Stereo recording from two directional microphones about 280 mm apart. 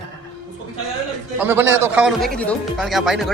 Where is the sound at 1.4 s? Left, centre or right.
Centre.